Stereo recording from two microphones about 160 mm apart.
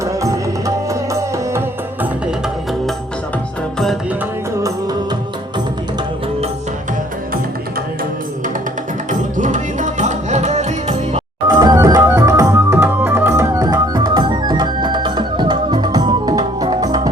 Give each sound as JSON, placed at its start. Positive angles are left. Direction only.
{"t": 0.0, "sound": "music", "side_deg": -20}
{"t": 9.0, "sound": "music", "side_deg": -50}
{"t": 11.4, "sound": "organ", "side_deg": -25}